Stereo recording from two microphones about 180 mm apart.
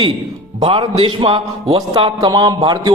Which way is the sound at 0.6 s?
30° right (ahead or behind).